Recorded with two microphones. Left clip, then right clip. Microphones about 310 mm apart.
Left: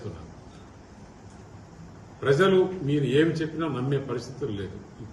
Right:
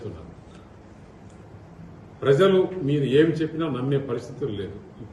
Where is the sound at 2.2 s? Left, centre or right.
Centre.